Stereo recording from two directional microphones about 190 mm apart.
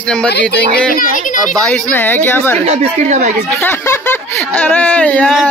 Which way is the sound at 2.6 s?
35° right (ahead or behind).